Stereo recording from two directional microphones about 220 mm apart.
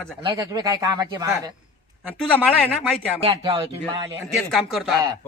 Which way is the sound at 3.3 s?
25° right (ahead or behind).